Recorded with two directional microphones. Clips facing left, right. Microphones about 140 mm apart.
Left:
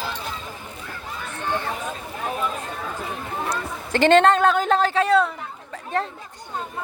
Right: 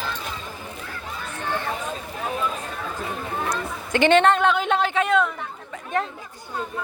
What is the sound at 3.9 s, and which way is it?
A woman's voice, 35° left (ahead or behind).